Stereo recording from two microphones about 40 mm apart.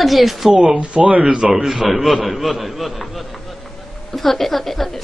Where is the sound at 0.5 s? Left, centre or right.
Right.